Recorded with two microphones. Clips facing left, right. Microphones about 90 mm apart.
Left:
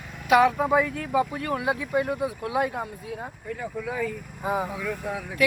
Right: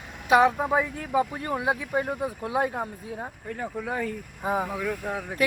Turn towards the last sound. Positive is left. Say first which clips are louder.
# even
turn(degrees=-40)  # may be behind; listen again after turning